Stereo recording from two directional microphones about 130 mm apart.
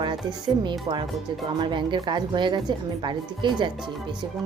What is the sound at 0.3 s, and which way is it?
Speech, 35° right (ahead or behind).